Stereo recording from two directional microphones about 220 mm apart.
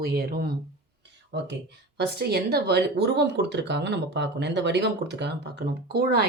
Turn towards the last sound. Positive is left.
turn(degrees=-45)  # may be behind; listen again after turning